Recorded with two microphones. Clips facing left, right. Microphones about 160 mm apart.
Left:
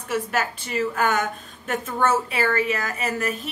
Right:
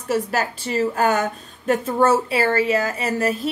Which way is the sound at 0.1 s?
35° right (ahead or behind).